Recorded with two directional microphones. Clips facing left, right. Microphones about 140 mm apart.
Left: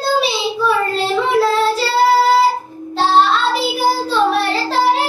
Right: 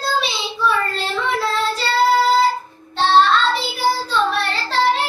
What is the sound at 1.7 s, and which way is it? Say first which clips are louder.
Child singing: left 3 dB; 5° left (ahead or behind).